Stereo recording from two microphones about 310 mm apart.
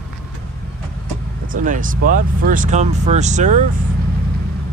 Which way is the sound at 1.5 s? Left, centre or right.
Right.